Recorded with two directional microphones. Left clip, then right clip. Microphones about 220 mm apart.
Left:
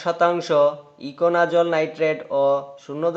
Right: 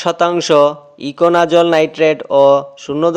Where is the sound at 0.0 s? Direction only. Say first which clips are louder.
Right 6 dB; 40° right (ahead or behind).